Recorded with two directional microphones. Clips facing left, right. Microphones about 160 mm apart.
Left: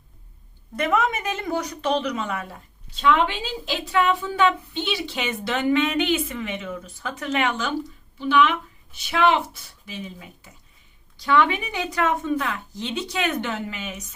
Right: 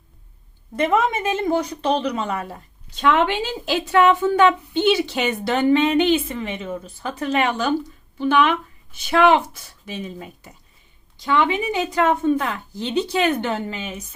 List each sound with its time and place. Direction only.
0.8 s a woman's voice: 25° right (ahead or behind)
3.0 s a woman's voice: 55° right (ahead or behind)
4.2 s a woman's voice: 50° right (ahead or behind); by 7.7 s 35° right (ahead or behind)
8.2 s speech: 50° right (ahead or behind)
11.2 s a woman's voice: 20° right (ahead or behind)